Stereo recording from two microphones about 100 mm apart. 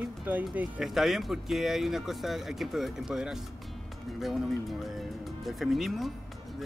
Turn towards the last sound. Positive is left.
turn(degrees=0)  # may be behind; listen again after turning